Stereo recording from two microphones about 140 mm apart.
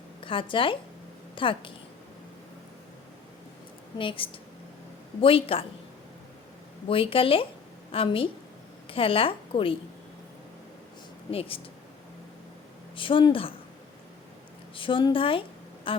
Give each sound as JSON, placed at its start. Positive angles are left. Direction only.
{"t": 0.2, "sound": "a woman's voice", "side_deg": 40}
{"t": 3.9, "sound": "a woman's voice", "side_deg": 40}
{"t": 6.8, "sound": "a woman's voice", "side_deg": 40}
{"t": 11.3, "sound": "a woman's voice", "side_deg": 40}
{"t": 13.0, "sound": "a woman's voice", "side_deg": 40}
{"t": 14.8, "sound": "a woman's voice", "side_deg": 35}